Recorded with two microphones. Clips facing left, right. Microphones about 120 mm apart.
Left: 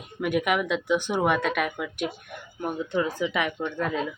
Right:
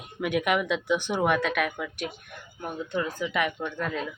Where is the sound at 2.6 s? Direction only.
20° left (ahead or behind).